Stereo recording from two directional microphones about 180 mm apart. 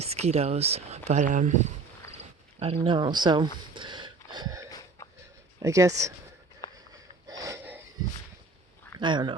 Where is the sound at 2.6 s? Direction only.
30° right (ahead or behind).